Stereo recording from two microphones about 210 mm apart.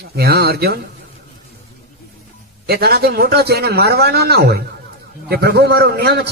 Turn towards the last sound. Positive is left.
turn(degrees=-50)  # may be behind; listen again after turning